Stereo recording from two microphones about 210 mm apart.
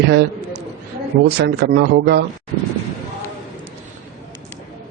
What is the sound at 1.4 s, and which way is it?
Speech, 50° right (ahead or behind).